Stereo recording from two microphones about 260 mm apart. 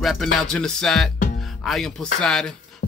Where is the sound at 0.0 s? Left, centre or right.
Centre.